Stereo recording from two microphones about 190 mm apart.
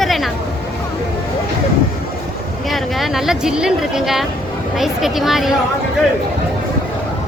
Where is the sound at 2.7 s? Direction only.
Centre (ahead or behind).